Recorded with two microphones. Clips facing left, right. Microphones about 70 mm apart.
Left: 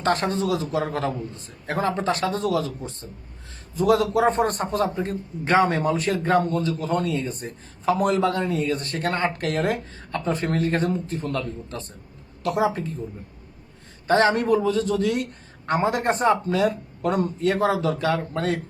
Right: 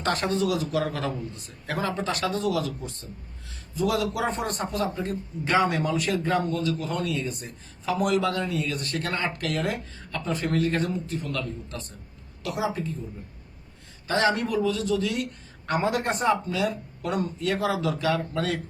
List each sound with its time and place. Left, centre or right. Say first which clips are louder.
0.0 s a man's voice: left 2 dB; left
3.8 s a man's voice: left 6 dB; left
12.4 s a woman's voice: left 6 dB; left
14.1 s a man's voice: left 5 dB; left
15.6 s a man's voice: left 3 dB; left